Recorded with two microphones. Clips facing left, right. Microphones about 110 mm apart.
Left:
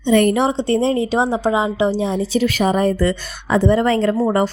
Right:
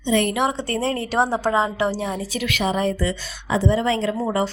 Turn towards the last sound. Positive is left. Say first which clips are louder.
# left 6 dB
turn(degrees=45)  # may be behind; listen again after turning